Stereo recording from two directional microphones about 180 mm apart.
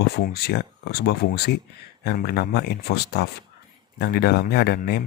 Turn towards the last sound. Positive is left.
turn(degrees=65)  # may be behind; listen again after turning